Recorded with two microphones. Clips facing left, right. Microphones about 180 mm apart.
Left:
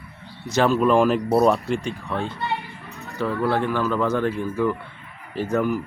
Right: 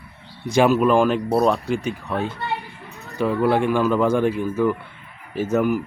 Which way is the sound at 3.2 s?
15° right (ahead or behind).